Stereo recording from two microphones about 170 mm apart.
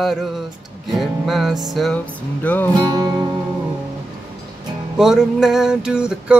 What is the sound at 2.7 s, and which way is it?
Music, 25° right (ahead or behind).